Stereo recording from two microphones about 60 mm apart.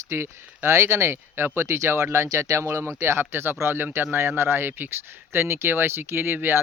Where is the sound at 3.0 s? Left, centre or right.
Right.